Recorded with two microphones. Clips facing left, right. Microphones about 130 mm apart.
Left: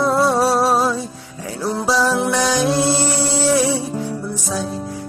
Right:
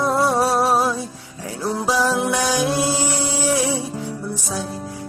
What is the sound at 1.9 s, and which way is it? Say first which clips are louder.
Music: left 2 dB; 15° right (ahead or behind).